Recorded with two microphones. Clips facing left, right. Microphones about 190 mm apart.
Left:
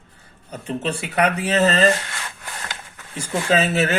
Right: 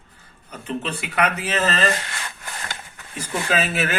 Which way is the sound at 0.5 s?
30° left (ahead or behind).